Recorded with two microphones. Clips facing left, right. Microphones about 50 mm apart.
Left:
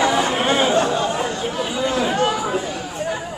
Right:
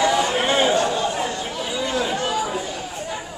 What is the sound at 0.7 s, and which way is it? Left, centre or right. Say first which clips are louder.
Chatter: left 2 dB; left.